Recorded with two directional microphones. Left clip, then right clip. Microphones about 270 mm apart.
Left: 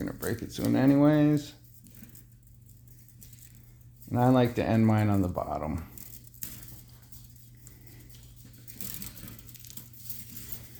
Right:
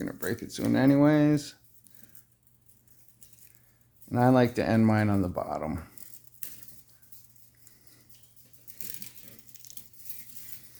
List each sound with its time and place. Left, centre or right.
0.0 s a sound: right
0.4 s speech: right
4.1 s speech: right
6.4 s cutlery: centre
9.5 s coin: centre